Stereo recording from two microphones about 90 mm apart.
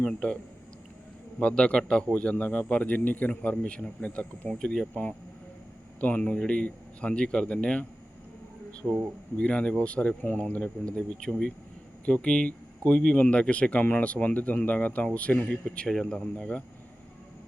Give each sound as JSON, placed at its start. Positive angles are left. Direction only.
{"t": 0.0, "sound": "speech", "side_deg": 10}
{"t": 1.4, "sound": "speech", "side_deg": 10}